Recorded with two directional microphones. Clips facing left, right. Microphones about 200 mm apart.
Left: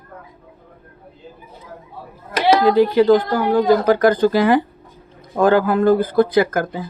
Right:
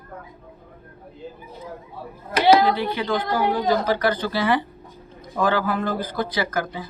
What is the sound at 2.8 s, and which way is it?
Speech, 40° left (ahead or behind).